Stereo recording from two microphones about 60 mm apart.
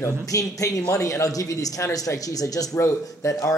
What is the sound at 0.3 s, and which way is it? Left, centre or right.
Speech, left.